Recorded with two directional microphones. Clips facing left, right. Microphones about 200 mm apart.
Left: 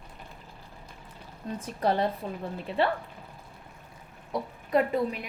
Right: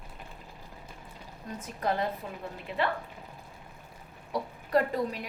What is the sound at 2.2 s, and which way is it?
Speech, 30° left (ahead or behind).